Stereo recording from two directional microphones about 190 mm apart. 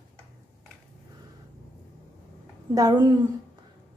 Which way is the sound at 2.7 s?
20° right (ahead or behind).